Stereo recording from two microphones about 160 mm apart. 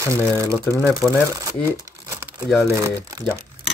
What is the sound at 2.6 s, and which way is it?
Speech, 20° right (ahead or behind).